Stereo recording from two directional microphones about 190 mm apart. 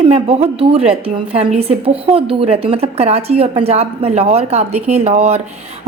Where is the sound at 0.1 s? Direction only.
30° right (ahead or behind).